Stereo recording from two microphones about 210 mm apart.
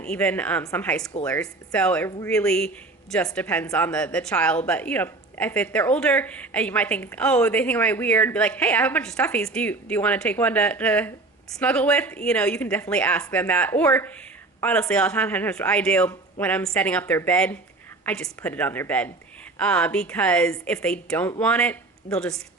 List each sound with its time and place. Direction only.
0.0 s a woman's voice: 5° left (ahead or behind)
1.2 s a woman's voice: 15° left (ahead or behind)
2.0 s a woman's voice: 15° left (ahead or behind)
2.3 s a woman's voice: 5° left (ahead or behind)